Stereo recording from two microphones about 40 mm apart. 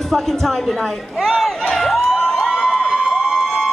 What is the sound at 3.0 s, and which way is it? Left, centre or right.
Emergency vehicle, right.